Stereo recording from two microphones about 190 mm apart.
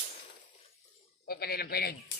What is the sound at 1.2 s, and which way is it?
Speech, 55° left (ahead or behind).